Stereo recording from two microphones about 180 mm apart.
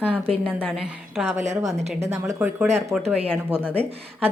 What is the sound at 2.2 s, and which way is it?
Speech, 10° right (ahead or behind).